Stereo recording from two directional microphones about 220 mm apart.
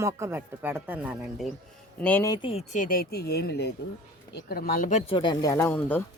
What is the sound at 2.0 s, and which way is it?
Speech, 10° left (ahead or behind).